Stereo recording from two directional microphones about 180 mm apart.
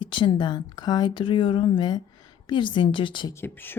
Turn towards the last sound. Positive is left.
turn(degrees=10)  # may be behind; listen again after turning